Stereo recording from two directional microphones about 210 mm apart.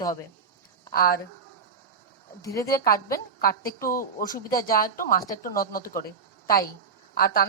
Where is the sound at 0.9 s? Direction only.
45° left (ahead or behind).